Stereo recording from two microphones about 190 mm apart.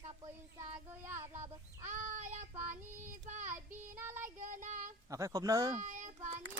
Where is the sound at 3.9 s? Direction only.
10° right (ahead or behind).